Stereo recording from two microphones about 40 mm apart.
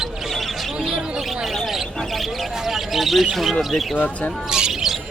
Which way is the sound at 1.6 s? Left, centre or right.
Centre.